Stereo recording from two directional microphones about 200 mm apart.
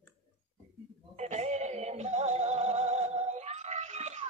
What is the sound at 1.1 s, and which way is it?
Music, 35° right (ahead or behind).